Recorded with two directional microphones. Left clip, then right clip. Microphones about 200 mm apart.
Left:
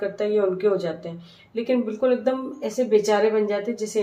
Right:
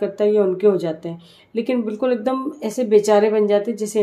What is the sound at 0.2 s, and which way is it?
Speech, 55° right (ahead or behind).